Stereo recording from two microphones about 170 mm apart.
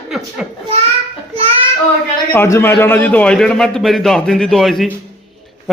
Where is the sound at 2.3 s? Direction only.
15° left (ahead or behind).